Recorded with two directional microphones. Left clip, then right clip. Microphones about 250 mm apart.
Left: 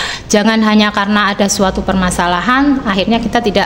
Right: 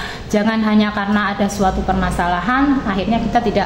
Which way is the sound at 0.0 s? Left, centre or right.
Left.